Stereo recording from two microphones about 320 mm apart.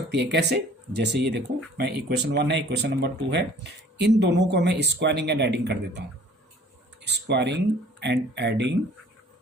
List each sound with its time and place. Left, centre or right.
0.1 s speech: right
7.0 s speech: right